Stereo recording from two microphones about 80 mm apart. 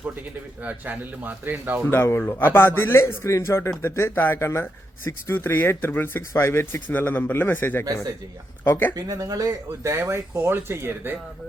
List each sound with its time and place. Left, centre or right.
0.6 s speech: centre
1.8 s speech: left
9.0 s speech: right
9.8 s speech: right